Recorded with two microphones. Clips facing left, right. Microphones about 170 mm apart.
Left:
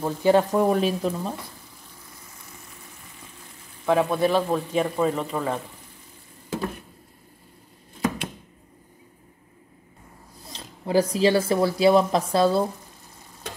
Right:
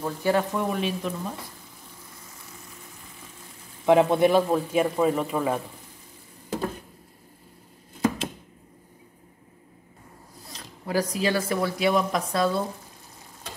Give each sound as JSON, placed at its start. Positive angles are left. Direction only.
{"t": 0.0, "sound": "speech", "side_deg": 20}
{"t": 0.4, "sound": "speech", "side_deg": 40}
{"t": 3.8, "sound": "a man's voice", "side_deg": -20}
{"t": 4.5, "sound": "speech", "side_deg": -5}
{"t": 10.5, "sound": "speech", "side_deg": 25}